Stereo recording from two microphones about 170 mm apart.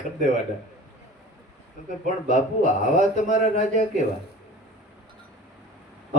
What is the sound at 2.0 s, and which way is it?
Speech, 45° left (ahead or behind).